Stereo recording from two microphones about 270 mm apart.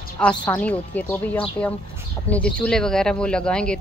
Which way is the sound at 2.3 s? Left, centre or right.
Centre.